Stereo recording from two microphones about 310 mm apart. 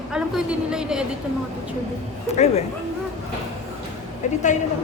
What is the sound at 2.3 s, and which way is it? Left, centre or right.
Speech, left.